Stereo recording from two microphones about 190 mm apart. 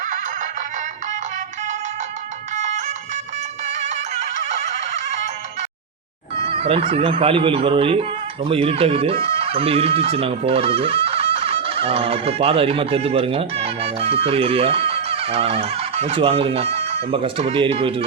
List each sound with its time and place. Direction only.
2.6 s music: 40° right (ahead or behind)
6.5 s speech: 30° right (ahead or behind)